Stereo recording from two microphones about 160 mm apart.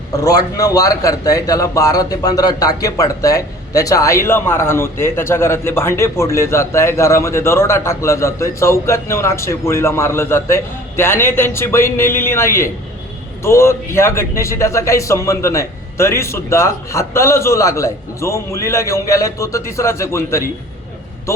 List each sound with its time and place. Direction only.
0.1 s a man's voice: 20° left (ahead or behind)